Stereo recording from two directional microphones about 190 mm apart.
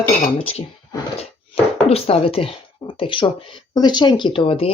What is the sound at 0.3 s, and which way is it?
Speech, 30° left (ahead or behind).